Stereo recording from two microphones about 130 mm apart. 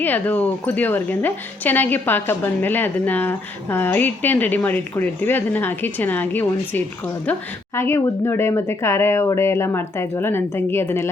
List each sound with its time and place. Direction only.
0.0 s a woman's voice: 15° left (ahead or behind)